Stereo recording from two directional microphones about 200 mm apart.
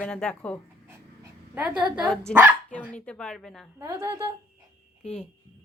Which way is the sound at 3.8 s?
15° right (ahead or behind).